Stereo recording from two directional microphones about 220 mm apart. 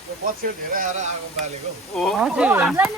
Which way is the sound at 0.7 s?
35° right (ahead or behind).